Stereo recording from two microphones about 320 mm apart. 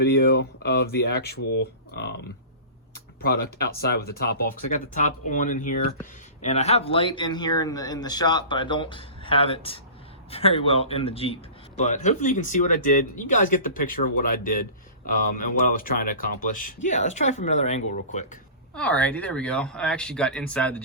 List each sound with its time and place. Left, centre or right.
0.0 s speech: left
2.9 s a sound: left
3.6 s speech: left
18.7 s speech: centre